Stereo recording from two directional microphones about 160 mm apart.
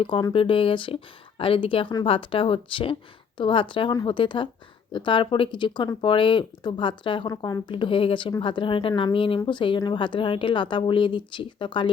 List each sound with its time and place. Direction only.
0.0 s speech: 30° left (ahead or behind)